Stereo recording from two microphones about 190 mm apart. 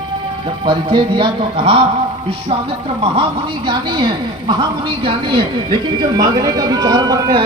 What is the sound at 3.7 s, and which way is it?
Speech, 25° right (ahead or behind).